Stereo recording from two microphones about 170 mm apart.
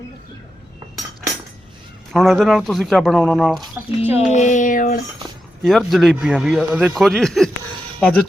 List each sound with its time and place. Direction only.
2.1 s a man's voice: centre (ahead or behind)
3.8 s speech: 15° right (ahead or behind)
4.3 s a sound: 45° left (ahead or behind)
5.6 s a man's voice: centre (ahead or behind)